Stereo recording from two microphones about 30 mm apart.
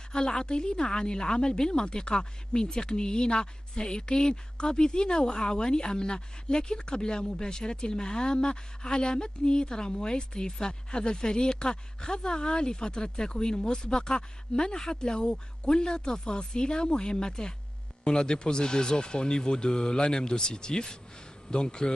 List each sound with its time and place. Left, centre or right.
0.1 s speech: left